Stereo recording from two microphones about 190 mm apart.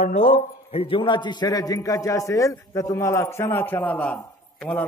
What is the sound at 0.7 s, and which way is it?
A man's voice, 30° left (ahead or behind).